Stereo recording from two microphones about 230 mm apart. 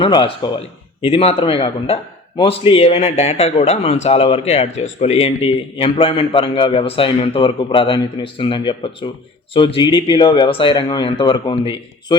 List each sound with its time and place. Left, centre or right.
0.0 s a man's voice: left